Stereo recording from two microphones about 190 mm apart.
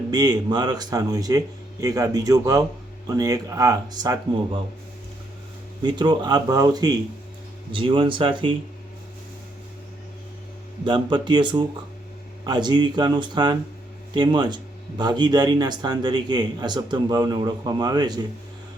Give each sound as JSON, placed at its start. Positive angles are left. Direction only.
{"t": 0.1, "sound": "speech", "side_deg": -20}
{"t": 5.8, "sound": "speech", "side_deg": -25}
{"t": 10.8, "sound": "speech", "side_deg": -25}